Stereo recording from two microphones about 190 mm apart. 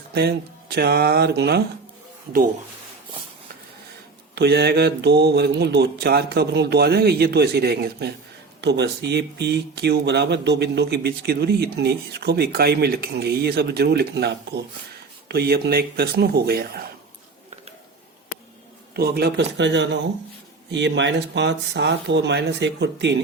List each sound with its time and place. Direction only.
0.1 s speech: 55° right (ahead or behind)
4.4 s speech: 60° right (ahead or behind)
18.9 s speech: 55° right (ahead or behind)